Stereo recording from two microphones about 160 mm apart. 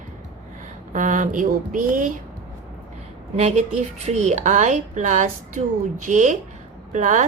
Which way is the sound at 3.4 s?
45° right (ahead or behind).